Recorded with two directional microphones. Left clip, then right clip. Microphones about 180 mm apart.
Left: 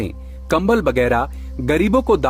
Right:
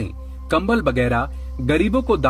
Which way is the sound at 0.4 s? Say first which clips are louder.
Left 2 dB; 45° left (ahead or behind).